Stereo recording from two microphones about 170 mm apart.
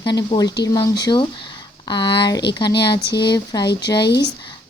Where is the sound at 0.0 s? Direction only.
25° left (ahead or behind).